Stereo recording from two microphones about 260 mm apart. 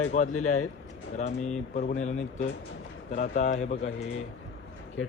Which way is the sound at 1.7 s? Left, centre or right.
Left.